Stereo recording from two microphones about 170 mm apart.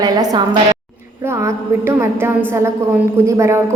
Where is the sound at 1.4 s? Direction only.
15° right (ahead or behind).